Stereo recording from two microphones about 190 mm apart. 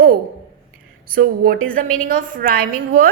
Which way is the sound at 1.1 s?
50° right (ahead or behind).